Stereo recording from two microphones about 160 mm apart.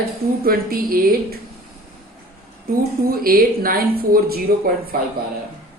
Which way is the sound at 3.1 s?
65° right (ahead or behind).